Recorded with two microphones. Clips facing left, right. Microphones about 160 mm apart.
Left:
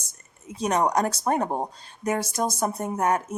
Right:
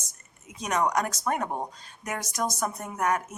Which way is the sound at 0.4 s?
30° left (ahead or behind).